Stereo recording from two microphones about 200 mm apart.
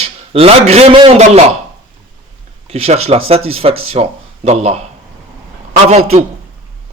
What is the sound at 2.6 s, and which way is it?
A man's voice, 30° right (ahead or behind).